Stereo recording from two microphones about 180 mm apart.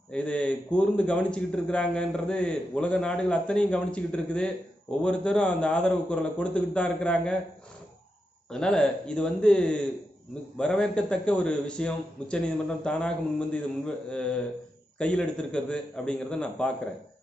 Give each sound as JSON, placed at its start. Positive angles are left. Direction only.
{"t": 0.1, "sound": "speech", "side_deg": 5}
{"t": 8.4, "sound": "speech", "side_deg": 5}